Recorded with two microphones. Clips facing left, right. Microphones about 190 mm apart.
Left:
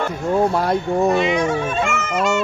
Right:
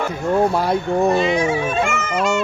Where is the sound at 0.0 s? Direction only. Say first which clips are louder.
Right 1 dB; centre (ahead or behind).